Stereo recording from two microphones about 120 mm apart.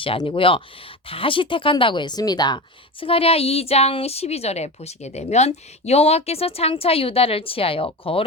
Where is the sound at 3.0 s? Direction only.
50° left (ahead or behind).